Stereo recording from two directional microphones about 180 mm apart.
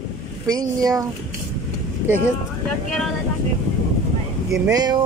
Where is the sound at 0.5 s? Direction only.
20° right (ahead or behind).